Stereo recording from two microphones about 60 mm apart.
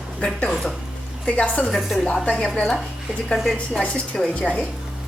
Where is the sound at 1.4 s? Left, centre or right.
Left.